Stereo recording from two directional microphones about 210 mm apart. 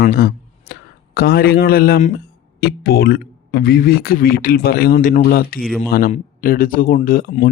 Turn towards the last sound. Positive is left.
turn(degrees=45)  # may be behind; listen again after turning